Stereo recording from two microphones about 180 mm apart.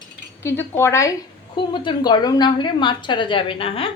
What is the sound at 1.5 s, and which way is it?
A woman's voice, 25° left (ahead or behind).